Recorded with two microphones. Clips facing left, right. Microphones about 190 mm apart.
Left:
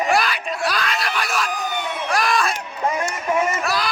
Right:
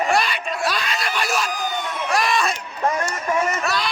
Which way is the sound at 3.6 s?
Centre (ahead or behind).